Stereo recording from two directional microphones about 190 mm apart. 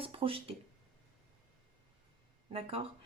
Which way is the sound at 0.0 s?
30° right (ahead or behind).